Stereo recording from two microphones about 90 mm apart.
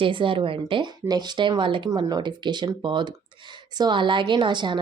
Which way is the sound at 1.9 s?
50° right (ahead or behind).